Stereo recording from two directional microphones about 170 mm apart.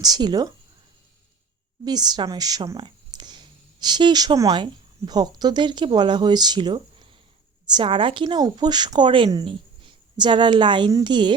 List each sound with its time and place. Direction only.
0.0 s a woman's voice: 25° right (ahead or behind)
1.8 s a woman's voice: 25° right (ahead or behind)